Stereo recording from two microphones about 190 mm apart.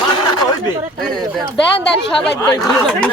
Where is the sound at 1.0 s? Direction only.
5° left (ahead or behind).